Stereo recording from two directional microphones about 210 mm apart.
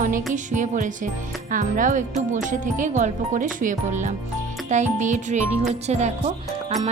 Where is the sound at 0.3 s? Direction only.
35° right (ahead or behind).